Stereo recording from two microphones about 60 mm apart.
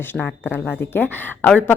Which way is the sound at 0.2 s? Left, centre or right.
Left.